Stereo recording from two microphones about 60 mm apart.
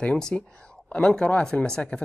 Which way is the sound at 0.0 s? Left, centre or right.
Centre.